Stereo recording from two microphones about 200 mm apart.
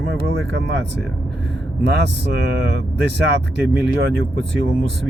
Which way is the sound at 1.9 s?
60° right (ahead or behind).